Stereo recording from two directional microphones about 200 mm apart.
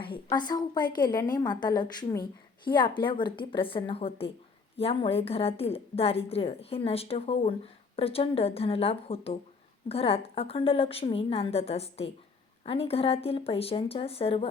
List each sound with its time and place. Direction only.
0.3 s a woman's voice: 20° left (ahead or behind)